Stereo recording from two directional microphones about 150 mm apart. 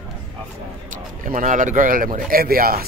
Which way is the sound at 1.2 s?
60° right (ahead or behind).